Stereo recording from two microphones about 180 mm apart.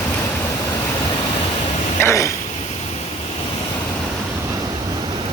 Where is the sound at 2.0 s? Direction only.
15° left (ahead or behind).